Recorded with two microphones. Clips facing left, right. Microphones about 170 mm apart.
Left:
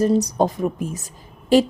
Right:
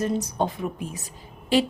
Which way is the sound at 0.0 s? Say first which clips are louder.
Left 7 dB; 35° left (ahead or behind).